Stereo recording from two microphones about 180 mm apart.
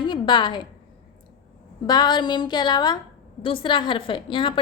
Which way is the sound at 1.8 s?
25° left (ahead or behind).